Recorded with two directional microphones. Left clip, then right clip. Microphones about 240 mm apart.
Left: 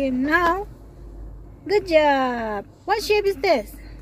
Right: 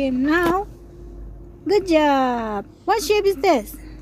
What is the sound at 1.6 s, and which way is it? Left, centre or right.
A woman's voice, centre.